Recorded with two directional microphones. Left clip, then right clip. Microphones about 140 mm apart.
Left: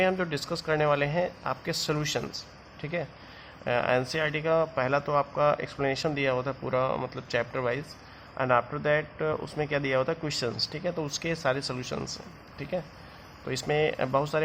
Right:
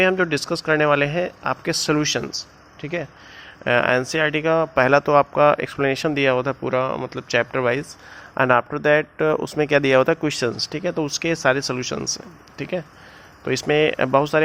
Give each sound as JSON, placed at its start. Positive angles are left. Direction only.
{"t": 0.0, "sound": "speech", "side_deg": -35}
{"t": 8.4, "sound": "speech", "side_deg": -55}